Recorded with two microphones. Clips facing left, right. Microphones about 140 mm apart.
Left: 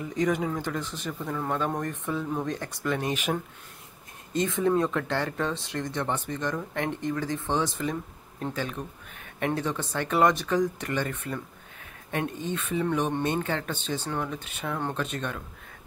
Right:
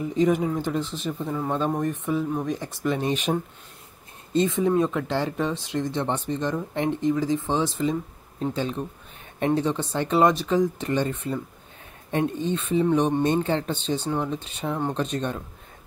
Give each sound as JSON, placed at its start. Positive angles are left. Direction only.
{"t": 0.0, "sound": "speech", "side_deg": -20}
{"t": 3.1, "sound": "speech", "side_deg": -35}
{"t": 11.8, "sound": "a sound", "side_deg": -30}
{"t": 12.4, "sound": "speech", "side_deg": -30}
{"t": 13.9, "sound": "speech", "side_deg": -15}
{"t": 14.6, "sound": "speech", "side_deg": -15}
{"t": 15.0, "sound": "speech", "side_deg": -30}